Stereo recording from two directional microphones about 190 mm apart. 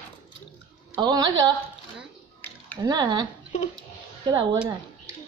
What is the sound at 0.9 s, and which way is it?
Speech, 20° right (ahead or behind).